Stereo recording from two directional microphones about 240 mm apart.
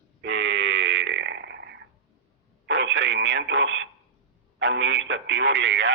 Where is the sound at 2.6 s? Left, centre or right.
Right.